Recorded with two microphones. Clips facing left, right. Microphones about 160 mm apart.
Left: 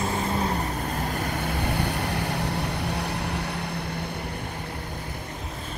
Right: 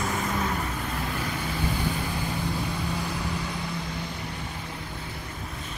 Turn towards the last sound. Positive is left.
turn(degrees=60)  # may be behind; listen again after turning